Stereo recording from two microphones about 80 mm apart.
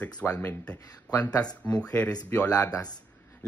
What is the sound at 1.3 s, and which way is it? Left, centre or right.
Speech, left.